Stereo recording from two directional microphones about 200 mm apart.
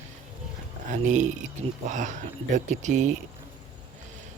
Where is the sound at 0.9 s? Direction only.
40° right (ahead or behind).